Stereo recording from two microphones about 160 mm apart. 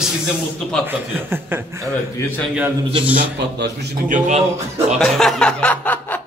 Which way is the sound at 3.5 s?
90° right.